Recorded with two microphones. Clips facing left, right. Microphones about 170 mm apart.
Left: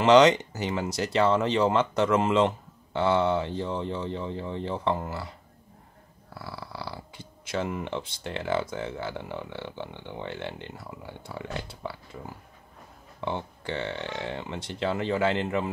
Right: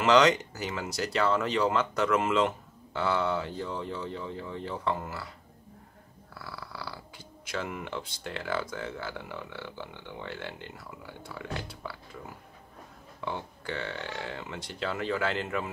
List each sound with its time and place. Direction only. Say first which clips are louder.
0.0 s speech: left 4 dB; 20° left (ahead or behind)
6.3 s dog: left 4 dB; 25° left (ahead or behind)
7.4 s speech: left 5 dB; 25° left (ahead or behind)
13.2 s speech: left 4 dB; 25° left (ahead or behind)